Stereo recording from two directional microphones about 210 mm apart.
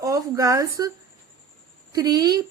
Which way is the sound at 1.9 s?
20° right (ahead or behind).